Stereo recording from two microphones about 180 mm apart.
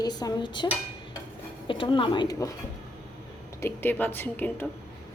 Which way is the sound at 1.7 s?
30° left (ahead or behind).